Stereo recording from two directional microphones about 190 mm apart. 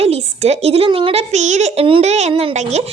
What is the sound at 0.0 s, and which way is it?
A woman's voice, 35° right (ahead or behind).